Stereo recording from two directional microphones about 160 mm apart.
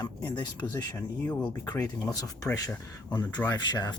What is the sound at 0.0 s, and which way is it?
Speech, 25° left (ahead or behind).